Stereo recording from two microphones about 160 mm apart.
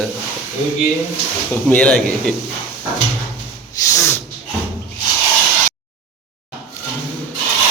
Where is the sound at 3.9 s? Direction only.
20° left (ahead or behind).